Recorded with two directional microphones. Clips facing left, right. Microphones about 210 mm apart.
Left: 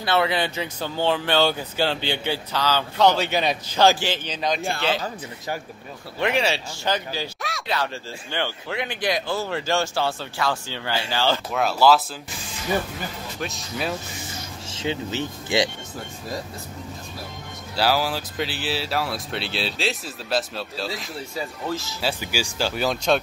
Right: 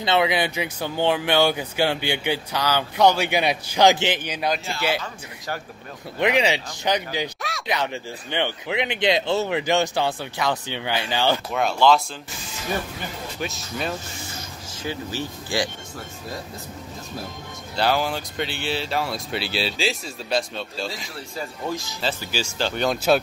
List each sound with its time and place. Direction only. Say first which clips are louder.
0.0 s speech: right 1 dB; 15° right (ahead or behind)
6.1 s speech: right 2 dB; 15° right (ahead or behind)
11.5 s speech: left 1 dB; 5° left (ahead or behind)
13.4 s speech: even; centre (ahead or behind)
14.7 s speech: left 3 dB; 25° left (ahead or behind)
17.7 s speech: even; 5° left (ahead or behind)
21.6 s speech: right 1 dB; 15° right (ahead or behind)
22.0 s speech: even; 10° left (ahead or behind)